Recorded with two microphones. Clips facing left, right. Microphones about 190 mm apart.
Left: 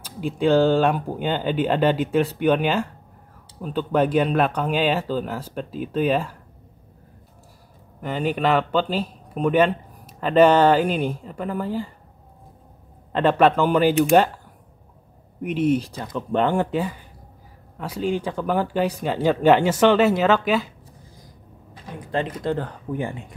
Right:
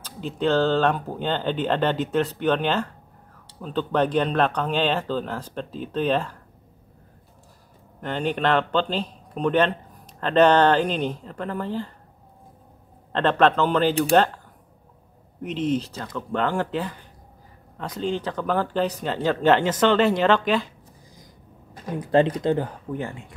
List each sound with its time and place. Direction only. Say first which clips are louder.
0.0 s speech: left 3 dB; 10° left (ahead or behind)
8.0 s speech: left 2 dB; 5° left (ahead or behind)
13.1 s speech: left 2 dB; 10° left (ahead or behind)
15.4 s speech: left 4 dB; 10° left (ahead or behind)
21.7 s speech: right 7 dB; 45° right (ahead or behind)
22.4 s speech: right 2 dB; 15° right (ahead or behind)
22.9 s speech: left 3 dB; 15° left (ahead or behind)